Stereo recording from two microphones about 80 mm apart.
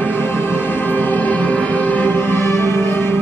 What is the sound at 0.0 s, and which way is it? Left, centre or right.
Music, left.